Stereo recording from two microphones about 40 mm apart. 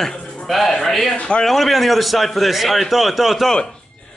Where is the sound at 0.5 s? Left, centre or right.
Centre.